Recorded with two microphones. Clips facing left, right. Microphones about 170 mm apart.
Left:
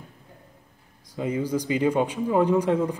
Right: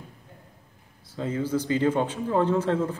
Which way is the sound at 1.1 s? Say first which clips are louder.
Left 1 dB; 15° left (ahead or behind).